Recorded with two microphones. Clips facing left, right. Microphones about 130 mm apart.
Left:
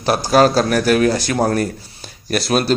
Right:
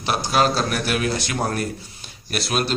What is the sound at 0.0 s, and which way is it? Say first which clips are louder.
A man's voice: left 7 dB; 40° left (ahead or behind).